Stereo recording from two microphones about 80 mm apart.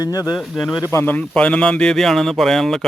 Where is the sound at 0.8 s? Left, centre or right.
Left.